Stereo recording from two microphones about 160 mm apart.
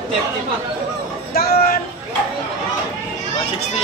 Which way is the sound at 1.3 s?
75° left (ahead or behind).